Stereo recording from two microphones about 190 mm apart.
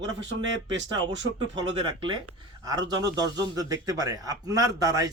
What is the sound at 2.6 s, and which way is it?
A man's voice, 20° right (ahead or behind).